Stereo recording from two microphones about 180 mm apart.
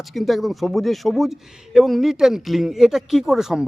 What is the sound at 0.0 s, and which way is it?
Speech, centre (ahead or behind).